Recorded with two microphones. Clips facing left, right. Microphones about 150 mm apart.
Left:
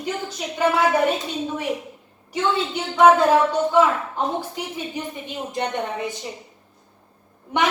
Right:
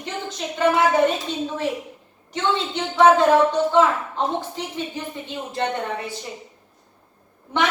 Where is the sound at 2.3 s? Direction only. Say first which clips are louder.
Left 1 dB; 10° left (ahead or behind).